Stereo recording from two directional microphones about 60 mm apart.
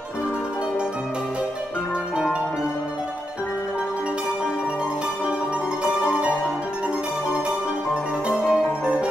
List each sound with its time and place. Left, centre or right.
7.9 s music: centre